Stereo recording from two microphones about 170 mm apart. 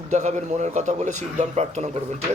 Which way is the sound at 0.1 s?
45° right (ahead or behind).